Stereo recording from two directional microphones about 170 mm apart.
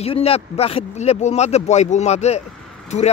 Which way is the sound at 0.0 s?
35° left (ahead or behind).